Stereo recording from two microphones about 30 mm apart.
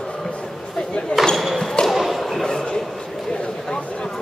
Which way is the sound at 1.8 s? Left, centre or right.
Centre.